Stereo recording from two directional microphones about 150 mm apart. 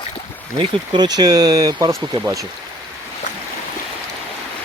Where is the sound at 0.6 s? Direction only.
30° right (ahead or behind).